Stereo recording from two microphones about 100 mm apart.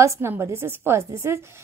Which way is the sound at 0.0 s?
30° right (ahead or behind).